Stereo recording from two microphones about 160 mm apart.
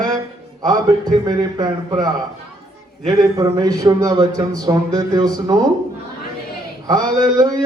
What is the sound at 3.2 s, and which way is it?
Speech, 20° right (ahead or behind).